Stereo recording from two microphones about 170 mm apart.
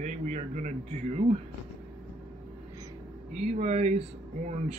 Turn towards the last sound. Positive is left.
turn(degrees=-40)  # may be behind; listen again after turning